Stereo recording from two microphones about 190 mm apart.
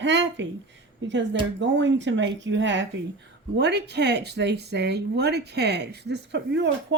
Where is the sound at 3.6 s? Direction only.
60° right (ahead or behind).